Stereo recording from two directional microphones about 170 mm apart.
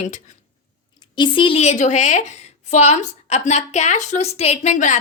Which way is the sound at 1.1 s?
30° left (ahead or behind).